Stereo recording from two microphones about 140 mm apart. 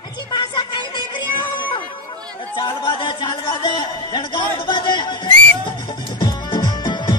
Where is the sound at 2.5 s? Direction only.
35° left (ahead or behind).